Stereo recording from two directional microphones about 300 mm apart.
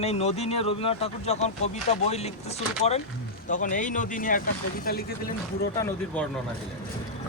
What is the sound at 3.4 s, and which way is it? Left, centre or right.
Speech, left.